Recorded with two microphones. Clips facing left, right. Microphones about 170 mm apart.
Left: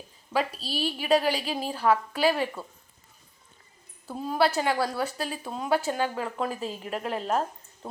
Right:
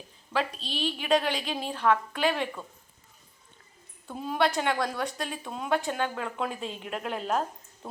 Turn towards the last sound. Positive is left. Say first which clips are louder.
# left 2 dB
turn(degrees=0)  # may be behind; listen again after turning